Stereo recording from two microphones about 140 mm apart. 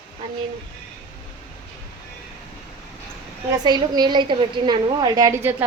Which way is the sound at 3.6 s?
30° right (ahead or behind).